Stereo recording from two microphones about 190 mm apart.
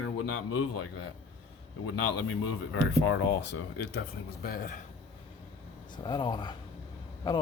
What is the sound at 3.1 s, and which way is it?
Speech, 75° left (ahead or behind).